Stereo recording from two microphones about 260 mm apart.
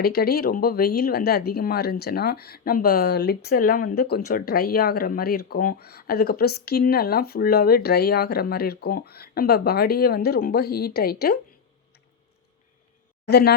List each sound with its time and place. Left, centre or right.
0.0 s speech: left
13.2 s speech: left